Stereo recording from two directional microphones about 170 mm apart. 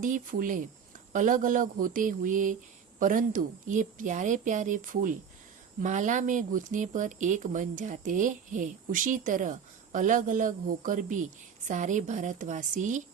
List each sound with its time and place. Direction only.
0.0 s speech: 55° right (ahead or behind)